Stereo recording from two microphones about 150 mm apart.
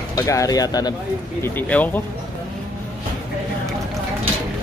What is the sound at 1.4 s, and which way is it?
Speech, 10° left (ahead or behind).